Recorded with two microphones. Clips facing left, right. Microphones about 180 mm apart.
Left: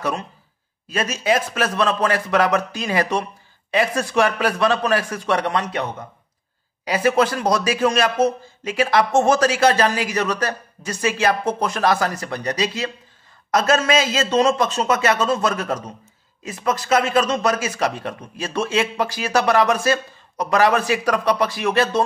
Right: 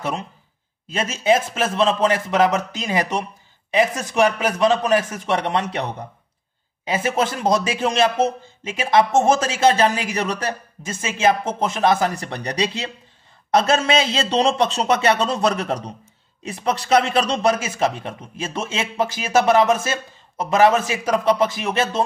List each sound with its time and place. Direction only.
0.8 s a man's voice: 25° right (ahead or behind)